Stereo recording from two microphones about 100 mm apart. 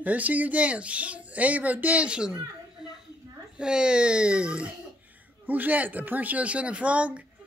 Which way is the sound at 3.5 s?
10° right (ahead or behind).